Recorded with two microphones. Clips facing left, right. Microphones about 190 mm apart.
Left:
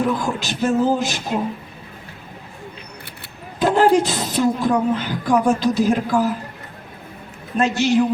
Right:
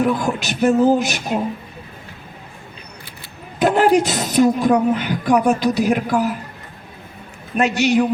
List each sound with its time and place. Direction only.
0.0 s speech: 15° right (ahead or behind)
3.6 s speech: 15° right (ahead or behind)
7.5 s speech: 15° right (ahead or behind)